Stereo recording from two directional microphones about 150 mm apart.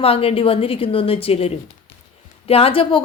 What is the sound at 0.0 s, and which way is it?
Speech, 40° left (ahead or behind).